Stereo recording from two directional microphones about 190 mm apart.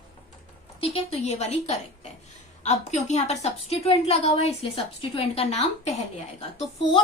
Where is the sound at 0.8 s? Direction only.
30° left (ahead or behind).